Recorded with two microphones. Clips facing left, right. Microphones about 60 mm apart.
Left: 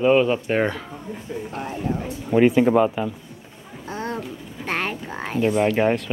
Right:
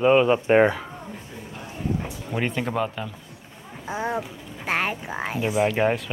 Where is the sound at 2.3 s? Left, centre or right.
Centre.